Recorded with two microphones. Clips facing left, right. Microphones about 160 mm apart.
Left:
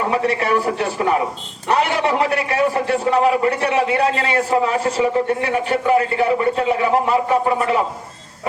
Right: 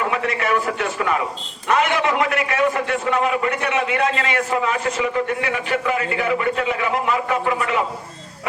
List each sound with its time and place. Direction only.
0.1 s a man's voice: 35° left (ahead or behind)